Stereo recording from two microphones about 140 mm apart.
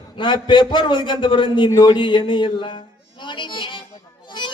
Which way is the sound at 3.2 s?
35° left (ahead or behind).